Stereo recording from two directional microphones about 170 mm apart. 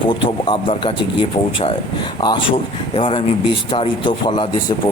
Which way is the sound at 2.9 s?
30° left (ahead or behind).